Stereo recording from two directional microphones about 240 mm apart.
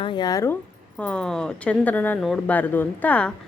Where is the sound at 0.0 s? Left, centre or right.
Centre.